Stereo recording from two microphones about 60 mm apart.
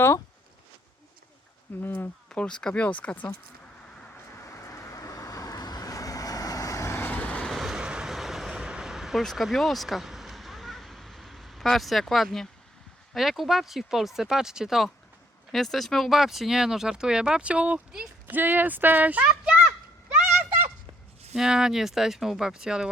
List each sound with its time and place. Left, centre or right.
1.8 s speech: left
2.3 s speech: centre
4.4 s vehicle: left
7.0 s vehicle: left
7.4 s train: centre
7.8 s vehicle: centre
8.1 s vehicle: centre
9.3 s a sound: centre
13.1 s speech: centre; by 19.3 s right
19.3 s a sound: right
21.3 s speech: centre